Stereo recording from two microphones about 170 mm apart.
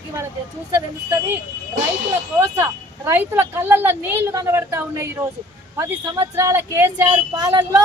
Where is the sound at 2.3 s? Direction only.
15° right (ahead or behind).